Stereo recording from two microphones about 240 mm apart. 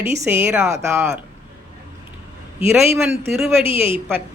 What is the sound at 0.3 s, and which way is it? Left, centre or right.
Speech, centre.